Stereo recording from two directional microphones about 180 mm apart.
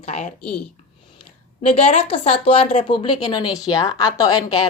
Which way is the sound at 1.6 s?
35° left (ahead or behind).